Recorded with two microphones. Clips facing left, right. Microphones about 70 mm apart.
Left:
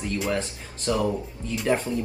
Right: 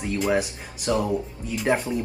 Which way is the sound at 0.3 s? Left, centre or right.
Centre.